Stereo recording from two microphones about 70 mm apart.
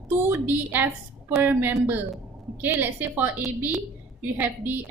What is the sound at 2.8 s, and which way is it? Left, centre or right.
Speech, right.